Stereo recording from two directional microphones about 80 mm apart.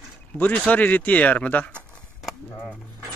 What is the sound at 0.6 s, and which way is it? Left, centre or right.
Speech, centre.